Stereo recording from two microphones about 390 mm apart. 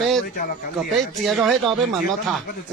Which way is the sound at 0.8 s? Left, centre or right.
Centre.